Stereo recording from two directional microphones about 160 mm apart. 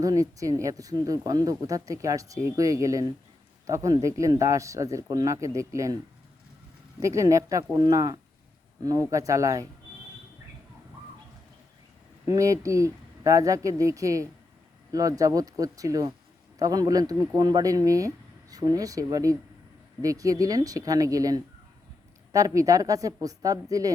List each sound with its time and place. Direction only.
0.0 s speech: 20° right (ahead or behind)
7.0 s speech: 20° right (ahead or behind)
12.2 s speech: 20° right (ahead or behind)